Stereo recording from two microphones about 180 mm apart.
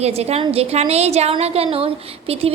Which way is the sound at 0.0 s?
35° right (ahead or behind).